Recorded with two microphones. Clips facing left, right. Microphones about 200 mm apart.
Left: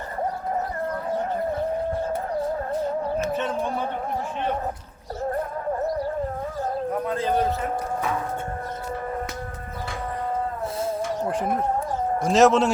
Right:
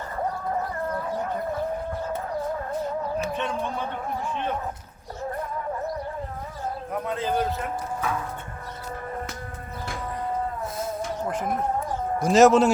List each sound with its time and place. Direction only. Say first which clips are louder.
7.1 s a man's voice: even; centre (ahead or behind)
11.3 s speech: left 2 dB; 30° left (ahead or behind)
12.2 s a man's voice: right 2 dB; centre (ahead or behind)